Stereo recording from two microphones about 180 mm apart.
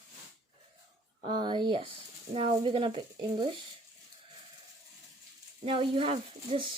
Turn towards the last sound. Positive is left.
turn(degrees=-30)  # may be behind; listen again after turning